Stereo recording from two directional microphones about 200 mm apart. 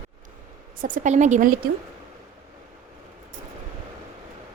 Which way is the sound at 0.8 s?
40° right (ahead or behind).